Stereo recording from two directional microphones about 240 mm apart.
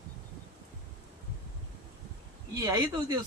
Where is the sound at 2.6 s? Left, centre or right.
Centre.